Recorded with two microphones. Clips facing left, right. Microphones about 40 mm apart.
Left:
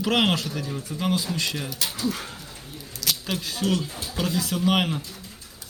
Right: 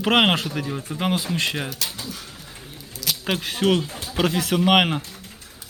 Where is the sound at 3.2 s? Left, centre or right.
Right.